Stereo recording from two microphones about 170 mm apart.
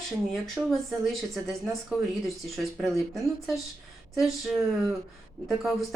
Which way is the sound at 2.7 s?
Centre (ahead or behind).